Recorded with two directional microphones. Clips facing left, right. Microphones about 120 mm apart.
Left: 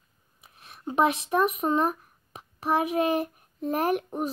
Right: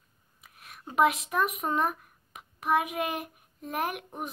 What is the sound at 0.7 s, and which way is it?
Speech, 30° left (ahead or behind).